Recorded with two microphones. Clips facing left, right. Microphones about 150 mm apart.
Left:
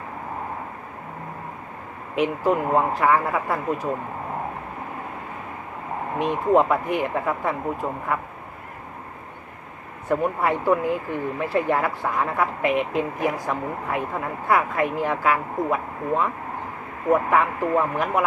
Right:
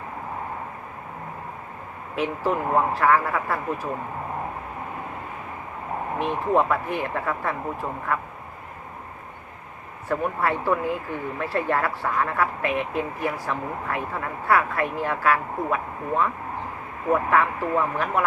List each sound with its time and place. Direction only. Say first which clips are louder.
2.1 s speech: left 3 dB; 15° left (ahead or behind)
6.1 s speech: left 3 dB; 15° left (ahead or behind)
10.1 s speech: left 2 dB; 15° left (ahead or behind)